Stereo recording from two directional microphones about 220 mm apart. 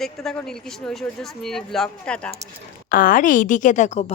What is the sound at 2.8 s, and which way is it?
A woman's voice, 40° left (ahead or behind).